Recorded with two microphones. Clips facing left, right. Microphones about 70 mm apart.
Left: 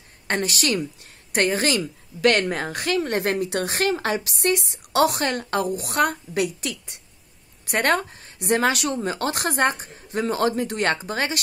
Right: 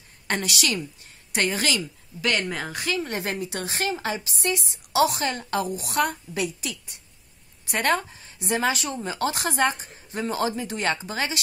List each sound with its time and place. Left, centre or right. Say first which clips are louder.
0.3 s speech: left 3 dB; left
2.2 s speech: left 6 dB; left